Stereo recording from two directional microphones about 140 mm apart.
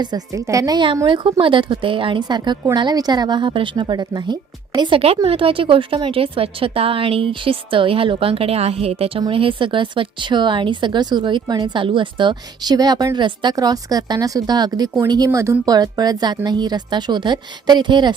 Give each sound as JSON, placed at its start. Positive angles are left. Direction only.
{"t": 0.0, "sound": "a woman's voice", "side_deg": -30}